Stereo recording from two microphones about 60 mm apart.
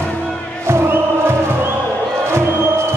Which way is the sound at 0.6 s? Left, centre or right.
Right.